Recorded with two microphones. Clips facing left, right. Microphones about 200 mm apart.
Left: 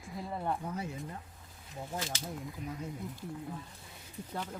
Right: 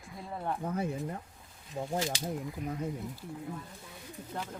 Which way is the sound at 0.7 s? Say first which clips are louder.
Right 6 dB; 55° right (ahead or behind).